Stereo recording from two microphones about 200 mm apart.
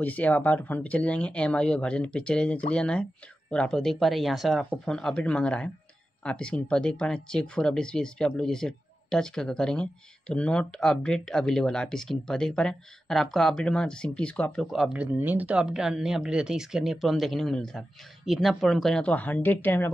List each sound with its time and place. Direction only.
0.0 s speech: 10° left (ahead or behind)